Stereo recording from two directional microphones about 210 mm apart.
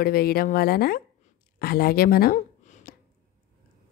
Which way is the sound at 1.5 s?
45° left (ahead or behind).